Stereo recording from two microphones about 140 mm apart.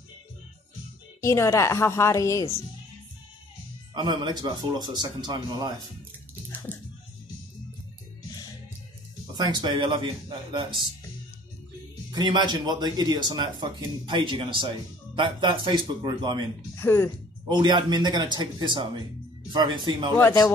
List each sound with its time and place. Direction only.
1.2 s a woman's voice: 20° left (ahead or behind)
3.9 s speech: 30° right (ahead or behind)
6.7 s music: 10° left (ahead or behind)
9.4 s speech: 35° right (ahead or behind)
12.1 s speech: 30° right (ahead or behind)
16.7 s speech: 15° left (ahead or behind)
17.5 s speech: 35° right (ahead or behind)
20.2 s a woman's voice: 20° left (ahead or behind)